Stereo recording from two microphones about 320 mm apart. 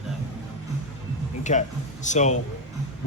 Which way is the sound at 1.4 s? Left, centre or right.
Left.